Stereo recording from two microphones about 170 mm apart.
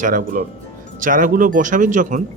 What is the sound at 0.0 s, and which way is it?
Speech, 50° right (ahead or behind).